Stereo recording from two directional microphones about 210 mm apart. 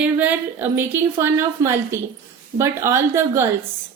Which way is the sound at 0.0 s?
5° right (ahead or behind).